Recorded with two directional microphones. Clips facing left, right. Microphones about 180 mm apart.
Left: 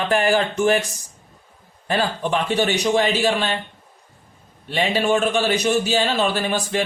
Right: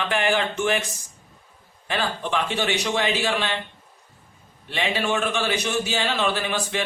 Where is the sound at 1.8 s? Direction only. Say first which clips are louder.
Left 5 dB; 40° left (ahead or behind).